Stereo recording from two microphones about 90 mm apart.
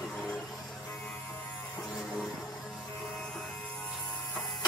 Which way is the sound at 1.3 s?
25° left (ahead or behind).